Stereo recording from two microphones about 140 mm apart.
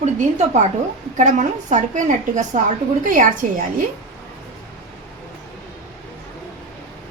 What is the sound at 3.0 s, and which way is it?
Speech, 70° right (ahead or behind).